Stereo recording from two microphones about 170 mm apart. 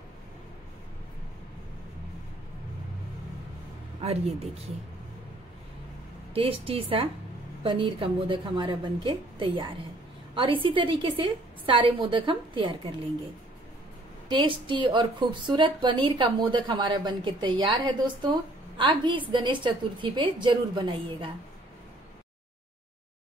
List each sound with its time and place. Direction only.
4.0 s a woman's voice: 35° right (ahead or behind)
6.3 s a woman's voice: 35° right (ahead or behind)
14.3 s a woman's voice: 30° right (ahead or behind)